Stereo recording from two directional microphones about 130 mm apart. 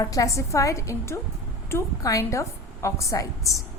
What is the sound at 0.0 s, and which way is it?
A woman's voice, 25° left (ahead or behind).